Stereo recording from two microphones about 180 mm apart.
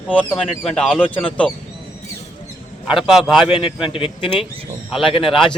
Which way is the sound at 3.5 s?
30° left (ahead or behind).